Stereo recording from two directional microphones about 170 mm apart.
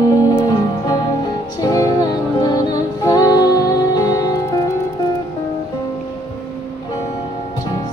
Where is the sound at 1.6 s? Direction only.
20° left (ahead or behind).